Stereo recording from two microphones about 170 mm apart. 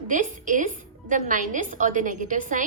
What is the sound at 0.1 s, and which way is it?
A woman's voice, 50° right (ahead or behind).